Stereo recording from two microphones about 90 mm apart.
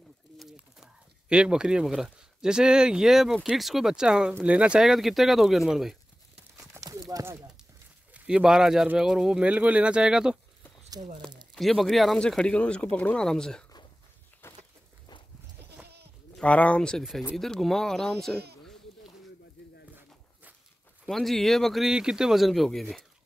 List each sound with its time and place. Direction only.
0.4 s bird: 5° right (ahead or behind)
1.3 s speech: 10° right (ahead or behind)
6.7 s horse: 40° right (ahead or behind)
8.1 s speech: 10° right (ahead or behind)
11.5 s speech: centre (ahead or behind)
14.4 s a sound: 25° left (ahead or behind)
16.3 s speech: 15° left (ahead or behind)
19.6 s bird: 10° left (ahead or behind)
21.1 s speech: centre (ahead or behind)